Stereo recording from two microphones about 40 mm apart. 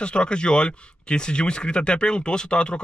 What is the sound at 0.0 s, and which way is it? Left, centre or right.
Speech, left.